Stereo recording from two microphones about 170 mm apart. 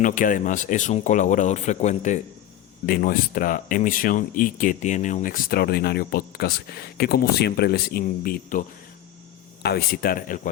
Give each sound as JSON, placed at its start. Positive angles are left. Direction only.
{"t": 0.0, "sound": "speech", "side_deg": 50}
{"t": 2.8, "sound": "speech", "side_deg": 60}
{"t": 9.6, "sound": "speech", "side_deg": 65}